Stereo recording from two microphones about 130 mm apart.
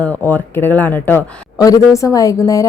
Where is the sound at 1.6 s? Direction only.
25° left (ahead or behind).